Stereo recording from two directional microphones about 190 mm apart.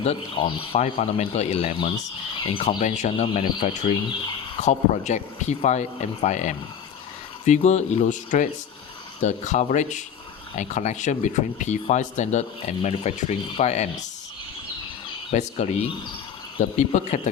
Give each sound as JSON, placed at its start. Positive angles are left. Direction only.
{"t": 0.0, "sound": "speech", "side_deg": 30}
{"t": 15.3, "sound": "speech", "side_deg": 35}